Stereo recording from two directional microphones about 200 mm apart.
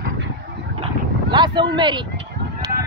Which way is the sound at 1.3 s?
25° right (ahead or behind).